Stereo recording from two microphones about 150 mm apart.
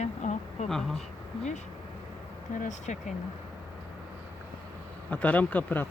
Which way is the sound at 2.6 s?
50° left (ahead or behind).